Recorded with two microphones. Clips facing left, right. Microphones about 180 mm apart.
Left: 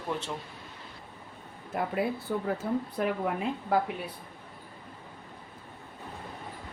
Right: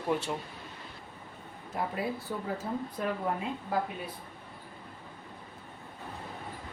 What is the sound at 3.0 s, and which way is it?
Speech, 70° left (ahead or behind).